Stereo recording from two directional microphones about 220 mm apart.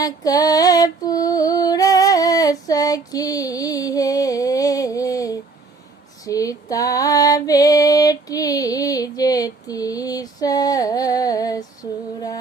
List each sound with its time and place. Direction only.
0.0 s female singing: 15° left (ahead or behind)